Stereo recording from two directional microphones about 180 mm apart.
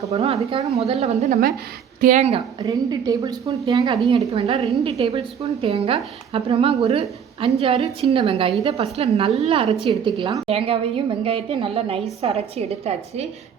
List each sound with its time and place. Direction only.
0.1 s a woman's voice: 35° right (ahead or behind); by 3.9 s 20° right (ahead or behind)
4.3 s a woman's voice: 35° right (ahead or behind)